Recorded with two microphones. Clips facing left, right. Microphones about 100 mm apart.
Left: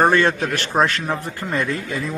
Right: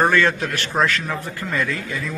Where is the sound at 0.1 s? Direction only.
30° left (ahead or behind).